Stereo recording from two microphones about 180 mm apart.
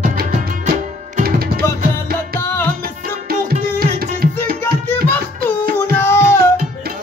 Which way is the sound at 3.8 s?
55° right (ahead or behind).